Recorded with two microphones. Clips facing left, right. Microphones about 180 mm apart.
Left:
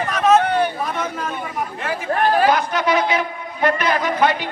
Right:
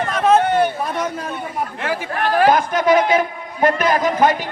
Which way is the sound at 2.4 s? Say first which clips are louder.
Right 2 dB; 50° right (ahead or behind).